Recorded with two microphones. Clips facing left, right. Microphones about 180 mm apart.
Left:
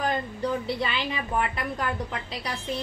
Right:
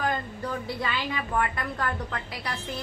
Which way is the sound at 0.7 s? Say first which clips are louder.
Left 1 dB; 20° left (ahead or behind).